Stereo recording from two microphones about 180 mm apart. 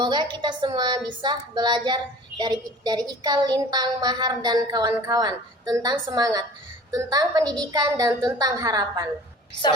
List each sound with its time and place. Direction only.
0.0 s speech: 25° right (ahead or behind)